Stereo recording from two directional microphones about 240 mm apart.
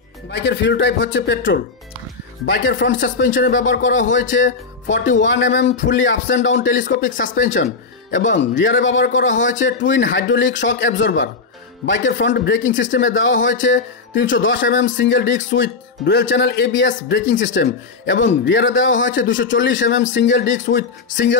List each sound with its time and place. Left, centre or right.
0.3 s speech: left
8.4 s speech: left